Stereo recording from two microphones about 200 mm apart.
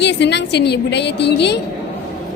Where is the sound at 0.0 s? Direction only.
60° left (ahead or behind).